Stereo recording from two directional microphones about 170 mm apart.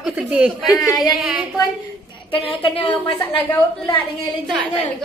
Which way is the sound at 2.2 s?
30° left (ahead or behind).